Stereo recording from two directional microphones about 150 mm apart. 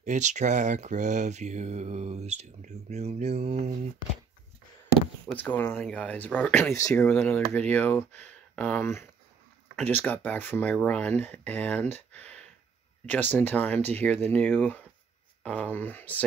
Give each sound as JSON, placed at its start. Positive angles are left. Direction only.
{"t": 0.0, "sound": "speech", "side_deg": -55}
{"t": 5.3, "sound": "speech", "side_deg": 10}